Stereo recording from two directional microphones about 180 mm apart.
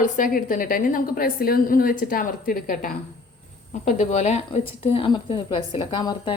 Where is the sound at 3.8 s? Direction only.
40° left (ahead or behind); by 6.3 s 25° left (ahead or behind).